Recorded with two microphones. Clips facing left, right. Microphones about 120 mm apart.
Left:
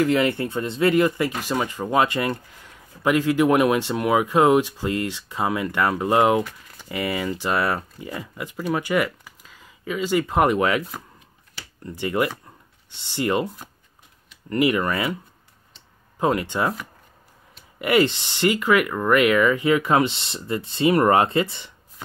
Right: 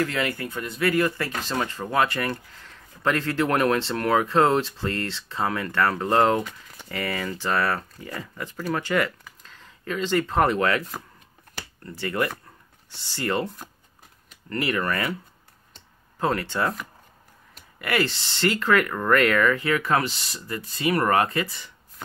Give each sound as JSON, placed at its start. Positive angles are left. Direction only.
{"t": 0.0, "sound": "speech", "side_deg": 20}
{"t": 11.8, "sound": "speech", "side_deg": 15}
{"t": 14.5, "sound": "speech", "side_deg": 15}
{"t": 16.2, "sound": "speech", "side_deg": 15}
{"t": 17.7, "sound": "speech", "side_deg": 20}